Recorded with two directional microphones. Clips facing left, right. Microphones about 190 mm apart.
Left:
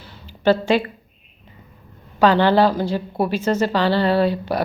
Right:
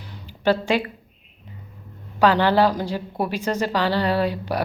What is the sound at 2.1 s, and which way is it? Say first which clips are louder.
A woman's voice: left 2 dB; 10° right (ahead or behind).